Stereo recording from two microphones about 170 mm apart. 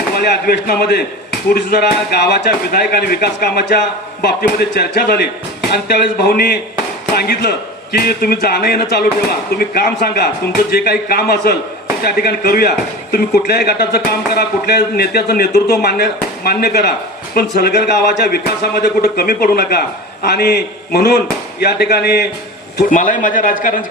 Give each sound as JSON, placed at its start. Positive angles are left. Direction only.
{"t": 0.1, "sound": "speech", "side_deg": 65}
{"t": 22.9, "sound": "a man's voice", "side_deg": 50}